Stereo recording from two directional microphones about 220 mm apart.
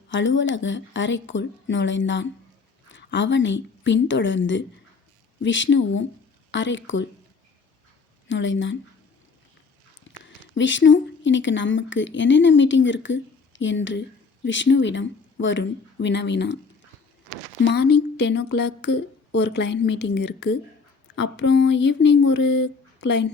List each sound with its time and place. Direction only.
0.1 s a woman's voice: 55° left (ahead or behind)
8.3 s speech: 60° left (ahead or behind)
10.5 s speech: 55° left (ahead or behind)
17.6 s speech: 50° left (ahead or behind)